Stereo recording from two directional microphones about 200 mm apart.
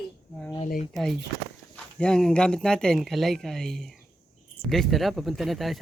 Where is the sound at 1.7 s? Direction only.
5° left (ahead or behind).